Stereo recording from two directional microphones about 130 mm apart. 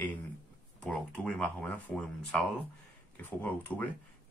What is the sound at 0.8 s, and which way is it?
Speech, 5° left (ahead or behind).